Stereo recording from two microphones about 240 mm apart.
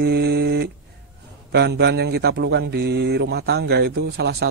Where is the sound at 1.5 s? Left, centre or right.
Right.